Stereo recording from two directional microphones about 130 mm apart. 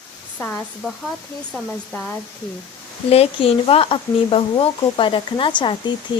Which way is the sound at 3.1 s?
50° left (ahead or behind).